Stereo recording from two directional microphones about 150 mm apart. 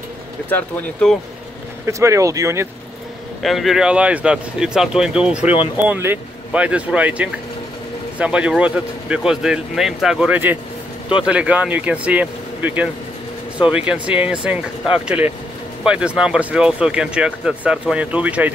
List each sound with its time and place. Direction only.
0.5 s speech: 5° left (ahead or behind)
1.9 s speech: 20° right (ahead or behind)
3.4 s speech: centre (ahead or behind)